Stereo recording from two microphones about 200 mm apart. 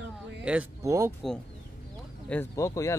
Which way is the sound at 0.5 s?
10° right (ahead or behind).